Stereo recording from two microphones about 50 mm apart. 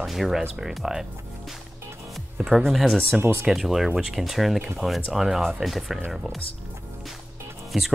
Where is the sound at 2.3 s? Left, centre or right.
Centre.